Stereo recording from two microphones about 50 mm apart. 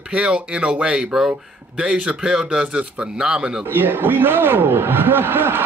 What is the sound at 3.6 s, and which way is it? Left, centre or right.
A man's voice, right.